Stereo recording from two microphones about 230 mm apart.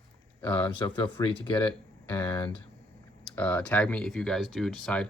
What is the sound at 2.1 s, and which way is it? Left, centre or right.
Speech, centre.